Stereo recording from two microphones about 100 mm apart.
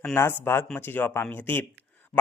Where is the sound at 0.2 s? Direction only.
25° left (ahead or behind).